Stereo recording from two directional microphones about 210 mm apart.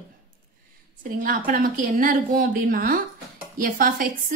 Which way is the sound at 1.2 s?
40° right (ahead or behind).